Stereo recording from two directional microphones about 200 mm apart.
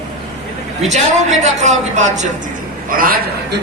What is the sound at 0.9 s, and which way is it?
Speech, 35° right (ahead or behind).